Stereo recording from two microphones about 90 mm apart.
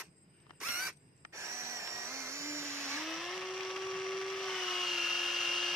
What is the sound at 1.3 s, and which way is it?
Tools, 30° right (ahead or behind).